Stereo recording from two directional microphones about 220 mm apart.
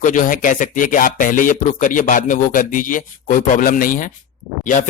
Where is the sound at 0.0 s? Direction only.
35° left (ahead or behind).